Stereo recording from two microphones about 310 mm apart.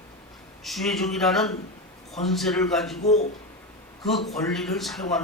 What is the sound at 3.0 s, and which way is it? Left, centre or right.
Speech, left.